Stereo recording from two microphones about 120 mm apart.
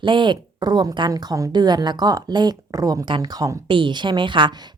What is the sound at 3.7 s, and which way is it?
Speech, 40° right (ahead or behind).